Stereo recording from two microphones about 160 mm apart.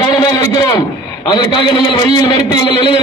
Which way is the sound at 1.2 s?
30° left (ahead or behind).